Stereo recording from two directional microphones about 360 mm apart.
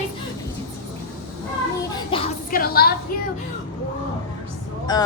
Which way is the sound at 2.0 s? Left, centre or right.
Centre.